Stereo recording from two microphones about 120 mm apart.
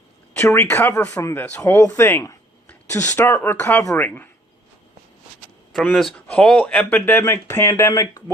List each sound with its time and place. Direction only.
0.3 s speech: 20° left (ahead or behind)
6.1 s speech: 10° left (ahead or behind); by 8.2 s 25° left (ahead or behind)